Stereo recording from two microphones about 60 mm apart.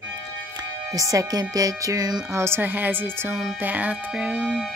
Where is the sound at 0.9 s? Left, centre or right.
Right.